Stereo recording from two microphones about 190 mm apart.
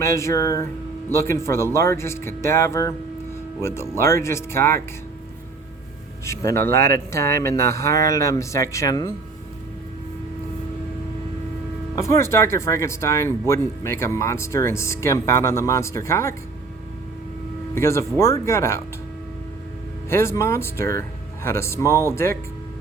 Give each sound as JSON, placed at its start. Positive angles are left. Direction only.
{"t": 0.0, "sound": "speech", "side_deg": 15}
{"t": 6.2, "sound": "speech", "side_deg": 15}
{"t": 11.9, "sound": "speech", "side_deg": 15}
{"t": 17.7, "sound": "speech", "side_deg": 15}
{"t": 20.1, "sound": "speech", "side_deg": 15}